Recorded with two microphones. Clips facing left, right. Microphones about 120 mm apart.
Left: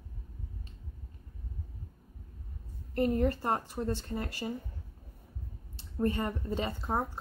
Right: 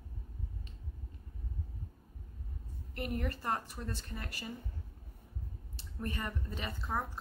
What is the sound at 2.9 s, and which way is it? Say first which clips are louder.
A woman's voice: left 10 dB; 30° left (ahead or behind).